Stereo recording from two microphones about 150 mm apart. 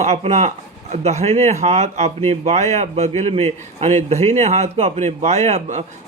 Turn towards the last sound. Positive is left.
turn(degrees=-50)  # may be behind; listen again after turning